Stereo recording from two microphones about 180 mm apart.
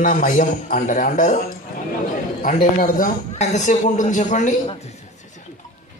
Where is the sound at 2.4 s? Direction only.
50° left (ahead or behind).